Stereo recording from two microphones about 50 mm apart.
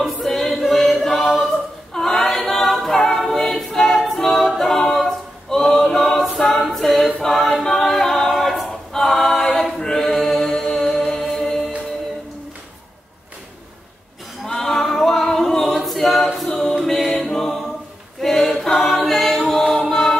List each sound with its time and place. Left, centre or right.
0.0 s choir: centre
1.3 s a capella: centre
7.2 s choir: centre
7.6 s a capella: centre
9.8 s chant: centre
14.4 s a capella: centre
16.7 s music: centre
18.2 s choir: centre